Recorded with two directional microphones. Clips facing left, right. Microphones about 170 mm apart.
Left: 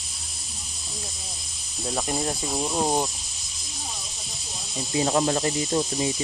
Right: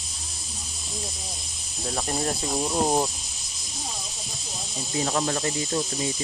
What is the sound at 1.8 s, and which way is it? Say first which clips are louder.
Cricket: even; 15° left (ahead or behind).